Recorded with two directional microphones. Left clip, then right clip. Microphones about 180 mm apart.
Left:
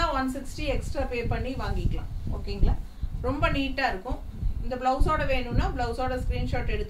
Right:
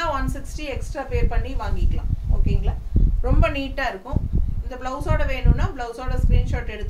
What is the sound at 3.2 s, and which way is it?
A woman's voice, 15° right (ahead or behind).